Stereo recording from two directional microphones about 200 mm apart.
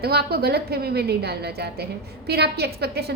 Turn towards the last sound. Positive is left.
turn(degrees=-55)  # may be behind; listen again after turning